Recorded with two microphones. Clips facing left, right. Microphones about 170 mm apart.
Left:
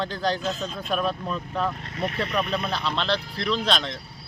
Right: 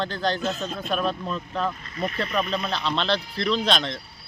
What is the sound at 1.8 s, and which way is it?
Speech, 75° left (ahead or behind).